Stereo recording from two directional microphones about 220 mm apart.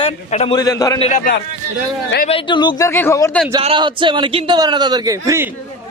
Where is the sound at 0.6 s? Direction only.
15° left (ahead or behind).